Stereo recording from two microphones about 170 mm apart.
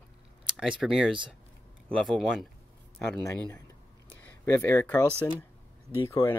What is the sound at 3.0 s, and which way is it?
Speech, 10° left (ahead or behind).